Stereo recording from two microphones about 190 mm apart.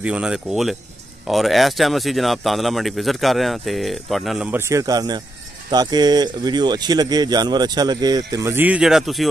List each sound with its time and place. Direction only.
0.0 s speech: 5° right (ahead or behind)